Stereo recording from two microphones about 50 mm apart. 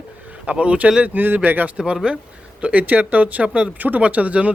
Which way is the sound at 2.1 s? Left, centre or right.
Right.